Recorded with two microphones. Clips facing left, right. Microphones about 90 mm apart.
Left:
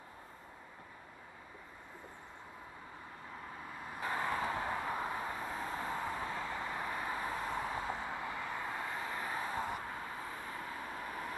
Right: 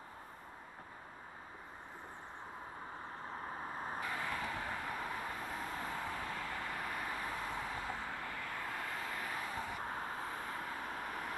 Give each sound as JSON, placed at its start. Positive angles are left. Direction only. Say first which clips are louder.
{"t": 3.5, "sound": "vehicle", "louder": "right 4 dB", "side_deg": -35}
{"t": 4.0, "sound": "vehicle", "louder": "left 7 dB", "side_deg": 35}
{"t": 9.8, "sound": "vehicle", "louder": "right 1 dB", "side_deg": -40}
{"t": 10.5, "sound": "vehicle", "louder": "right 1 dB", "side_deg": 30}